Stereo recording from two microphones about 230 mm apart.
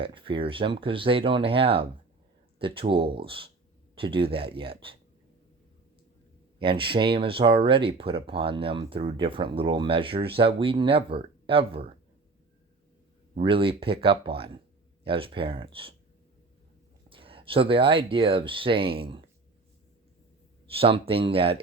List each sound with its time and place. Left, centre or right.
0.0 s speech: right
6.6 s speech: right
13.3 s speech: right
17.1 s speech: right
20.7 s speech: right